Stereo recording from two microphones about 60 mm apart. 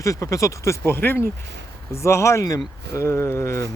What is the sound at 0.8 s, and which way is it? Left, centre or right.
Speech, left.